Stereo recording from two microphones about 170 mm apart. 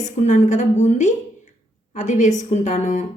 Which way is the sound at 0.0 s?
45° left (ahead or behind).